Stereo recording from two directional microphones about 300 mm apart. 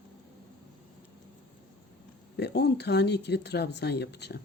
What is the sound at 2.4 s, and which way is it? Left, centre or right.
Speech, left.